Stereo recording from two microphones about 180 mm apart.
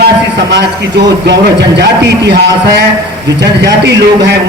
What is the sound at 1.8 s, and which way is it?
Speech, 70° right (ahead or behind).